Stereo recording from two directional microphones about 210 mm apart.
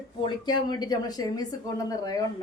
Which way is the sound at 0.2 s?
20° left (ahead or behind).